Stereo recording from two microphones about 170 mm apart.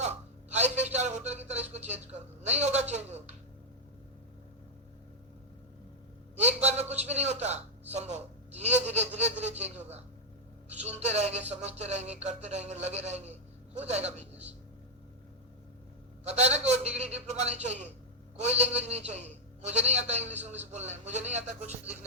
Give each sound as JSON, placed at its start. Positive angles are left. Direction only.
{"t": 0.5, "sound": "a man's voice", "side_deg": -40}
{"t": 6.4, "sound": "a man's voice", "side_deg": -40}
{"t": 10.8, "sound": "a man's voice", "side_deg": -40}
{"t": 16.2, "sound": "a man's voice", "side_deg": -40}